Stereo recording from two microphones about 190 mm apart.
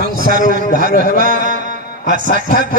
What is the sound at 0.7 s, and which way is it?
Speech, 50° left (ahead or behind).